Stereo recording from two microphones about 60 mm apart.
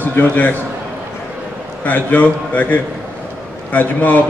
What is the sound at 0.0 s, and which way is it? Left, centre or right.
Speech, left.